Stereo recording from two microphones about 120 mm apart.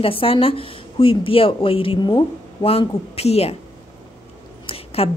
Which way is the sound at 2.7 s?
55° left (ahead or behind).